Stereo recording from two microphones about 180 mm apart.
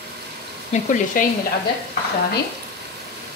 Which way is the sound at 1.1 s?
50° left (ahead or behind).